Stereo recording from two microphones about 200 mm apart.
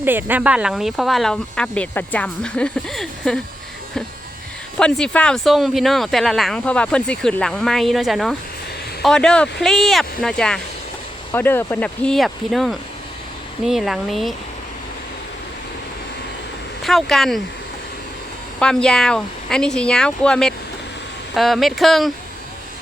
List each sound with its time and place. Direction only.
0.0 s speech: 10° right (ahead or behind)
4.8 s speech: 5° left (ahead or behind)
16.8 s speech: centre (ahead or behind)
18.6 s speech: 5° left (ahead or behind)